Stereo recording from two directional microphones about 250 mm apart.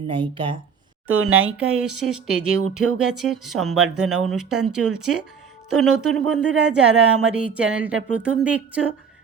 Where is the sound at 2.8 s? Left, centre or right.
Right.